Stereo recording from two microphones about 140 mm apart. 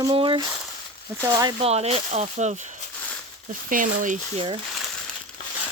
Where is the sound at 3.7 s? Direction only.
70° right (ahead or behind).